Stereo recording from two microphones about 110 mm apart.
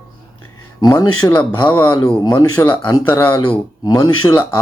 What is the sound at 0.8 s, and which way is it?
Speech, 35° left (ahead or behind).